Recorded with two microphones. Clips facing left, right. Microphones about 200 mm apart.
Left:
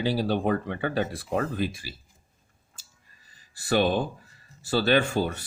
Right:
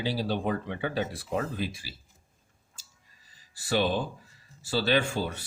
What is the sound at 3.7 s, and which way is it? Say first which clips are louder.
Speech: left 4 dB; 55° left (ahead or behind).